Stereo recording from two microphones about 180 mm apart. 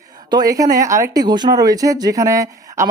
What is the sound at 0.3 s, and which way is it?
Speech, 20° right (ahead or behind).